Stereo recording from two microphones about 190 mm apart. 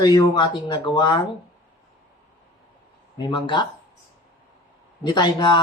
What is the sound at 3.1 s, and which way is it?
Speech, 25° left (ahead or behind).